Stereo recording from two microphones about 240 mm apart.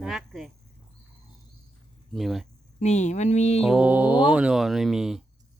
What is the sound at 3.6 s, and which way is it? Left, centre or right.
Speech, centre.